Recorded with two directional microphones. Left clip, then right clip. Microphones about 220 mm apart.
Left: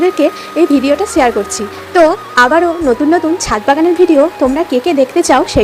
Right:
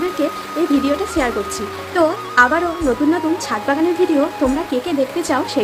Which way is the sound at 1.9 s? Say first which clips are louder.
Left 6 dB; 30° left (ahead or behind).